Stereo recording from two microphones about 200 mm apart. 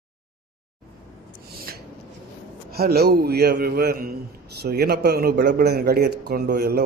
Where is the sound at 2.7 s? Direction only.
50° right (ahead or behind).